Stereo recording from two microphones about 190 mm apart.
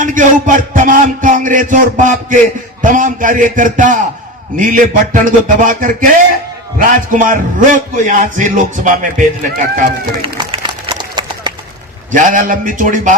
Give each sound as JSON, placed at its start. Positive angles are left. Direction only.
{"t": 0.0, "sound": "a man's voice", "side_deg": -45}
{"t": 10.4, "sound": "a sound", "side_deg": -25}
{"t": 12.1, "sound": "a man's voice", "side_deg": -45}